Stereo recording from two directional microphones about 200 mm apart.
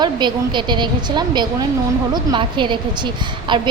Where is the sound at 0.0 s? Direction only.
20° right (ahead or behind).